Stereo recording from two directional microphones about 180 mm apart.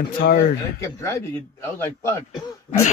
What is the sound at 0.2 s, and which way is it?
Speech, 70° left (ahead or behind).